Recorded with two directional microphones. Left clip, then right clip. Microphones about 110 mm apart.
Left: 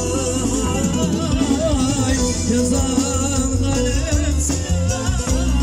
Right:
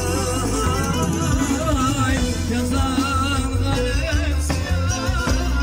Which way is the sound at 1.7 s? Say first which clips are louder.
Left 1 dB; 80° left.